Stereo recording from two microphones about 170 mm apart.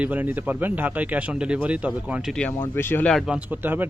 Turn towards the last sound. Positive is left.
turn(degrees=-10)  # may be behind; listen again after turning